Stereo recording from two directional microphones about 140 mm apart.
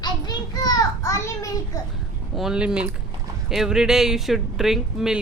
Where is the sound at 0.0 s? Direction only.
30° left (ahead or behind).